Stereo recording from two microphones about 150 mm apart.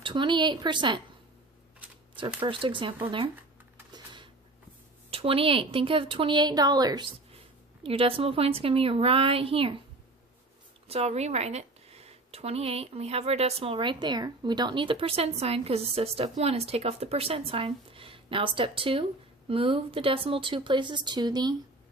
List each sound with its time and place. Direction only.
0.0 s speech: 30° right (ahead or behind)
2.1 s speech: 35° right (ahead or behind)
3.9 s a sound: 30° right (ahead or behind)
5.1 s speech: 40° right (ahead or behind)
7.9 s speech: 40° right (ahead or behind)
10.8 s speech: 45° right (ahead or behind)